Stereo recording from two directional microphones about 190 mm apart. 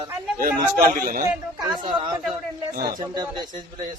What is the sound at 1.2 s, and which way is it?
Speech, 20° right (ahead or behind).